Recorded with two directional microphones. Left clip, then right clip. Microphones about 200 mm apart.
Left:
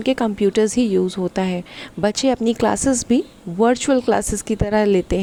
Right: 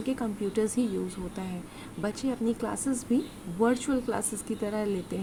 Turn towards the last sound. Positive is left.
turn(degrees=40)  # may be behind; listen again after turning